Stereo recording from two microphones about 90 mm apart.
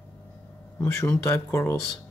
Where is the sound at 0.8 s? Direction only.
30° left (ahead or behind).